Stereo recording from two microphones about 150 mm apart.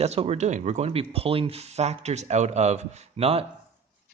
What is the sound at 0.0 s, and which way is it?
A man's voice, 45° right (ahead or behind).